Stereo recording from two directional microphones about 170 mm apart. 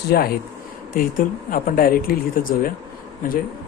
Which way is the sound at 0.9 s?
55° left (ahead or behind).